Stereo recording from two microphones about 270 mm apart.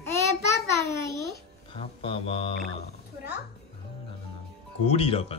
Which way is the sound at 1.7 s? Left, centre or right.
Left.